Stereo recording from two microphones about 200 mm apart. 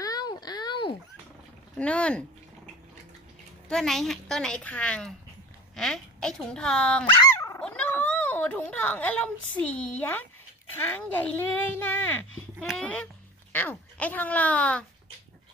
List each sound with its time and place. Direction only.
0.0 s a sound: 20° left (ahead or behind)
1.8 s a child's voice: 5° left (ahead or behind)
3.6 s a child's voice: 5° left (ahead or behind)